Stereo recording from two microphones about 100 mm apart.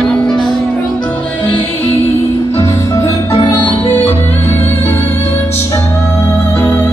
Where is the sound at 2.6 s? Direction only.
35° left (ahead or behind).